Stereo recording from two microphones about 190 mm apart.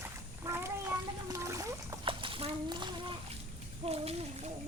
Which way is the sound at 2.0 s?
25° right (ahead or behind).